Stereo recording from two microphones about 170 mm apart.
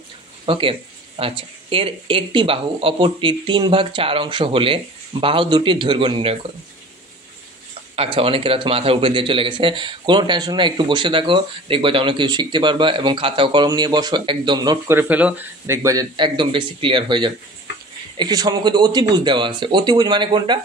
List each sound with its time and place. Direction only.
0.5 s speech: 30° right (ahead or behind)
7.9 s a man's voice: 35° right (ahead or behind)
15.0 s a man's voice: 10° right (ahead or behind); by 20.6 s 25° right (ahead or behind)